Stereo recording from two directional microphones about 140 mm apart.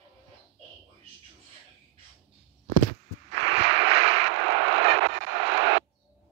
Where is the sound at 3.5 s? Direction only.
45° right (ahead or behind).